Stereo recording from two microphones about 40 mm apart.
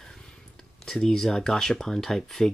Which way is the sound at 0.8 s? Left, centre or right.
Centre.